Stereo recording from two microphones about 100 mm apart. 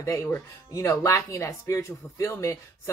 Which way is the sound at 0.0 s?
30° left (ahead or behind).